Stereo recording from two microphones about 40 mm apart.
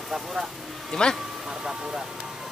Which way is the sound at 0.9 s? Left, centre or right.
Centre.